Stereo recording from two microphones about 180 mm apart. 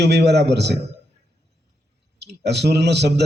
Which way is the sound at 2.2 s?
70° right (ahead or behind).